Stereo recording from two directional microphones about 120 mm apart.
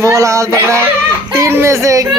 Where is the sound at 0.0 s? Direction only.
25° right (ahead or behind).